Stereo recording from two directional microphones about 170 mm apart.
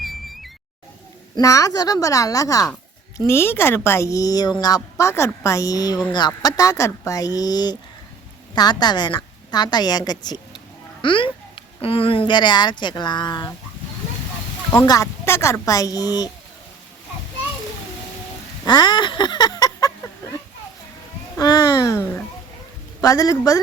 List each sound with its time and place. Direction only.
0.0 s music: centre (ahead or behind)
1.4 s a woman's voice: 20° left (ahead or behind)
14.8 s a woman's voice: 20° left (ahead or behind)
18.6 s a sound: 25° left (ahead or behind)
21.3 s a child's voice: 25° left (ahead or behind)